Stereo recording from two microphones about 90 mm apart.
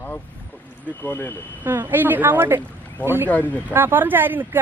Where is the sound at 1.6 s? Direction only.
25° right (ahead or behind).